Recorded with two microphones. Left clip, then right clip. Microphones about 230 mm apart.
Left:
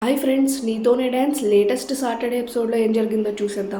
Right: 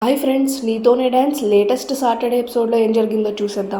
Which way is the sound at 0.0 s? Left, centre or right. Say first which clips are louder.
Right 3 dB; centre.